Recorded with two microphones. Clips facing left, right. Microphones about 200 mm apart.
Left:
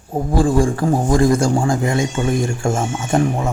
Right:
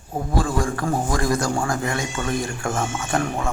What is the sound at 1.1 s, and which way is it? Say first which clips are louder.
Speech: left 8 dB; 25° left (ahead or behind).